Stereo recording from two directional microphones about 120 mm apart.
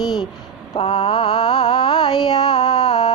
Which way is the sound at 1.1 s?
35° left (ahead or behind).